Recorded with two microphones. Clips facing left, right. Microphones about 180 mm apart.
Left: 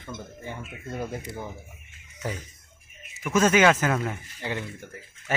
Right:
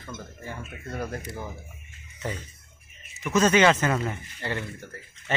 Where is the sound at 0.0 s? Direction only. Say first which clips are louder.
Left 1 dB; 20° left (ahead or behind).